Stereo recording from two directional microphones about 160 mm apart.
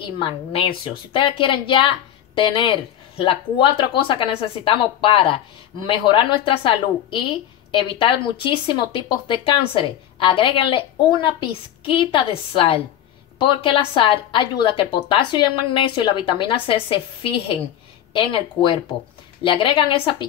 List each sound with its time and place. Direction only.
0.0 s a woman's voice: 35° left (ahead or behind)